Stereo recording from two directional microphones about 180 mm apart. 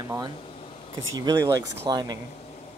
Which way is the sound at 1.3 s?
15° right (ahead or behind).